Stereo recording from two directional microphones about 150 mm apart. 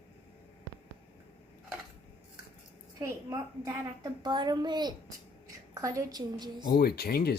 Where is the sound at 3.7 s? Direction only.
25° right (ahead or behind).